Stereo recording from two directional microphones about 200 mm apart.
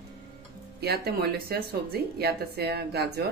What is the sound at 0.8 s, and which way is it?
Speech, 50° right (ahead or behind).